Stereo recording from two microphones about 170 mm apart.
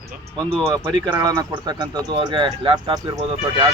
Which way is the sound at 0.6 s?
15° right (ahead or behind).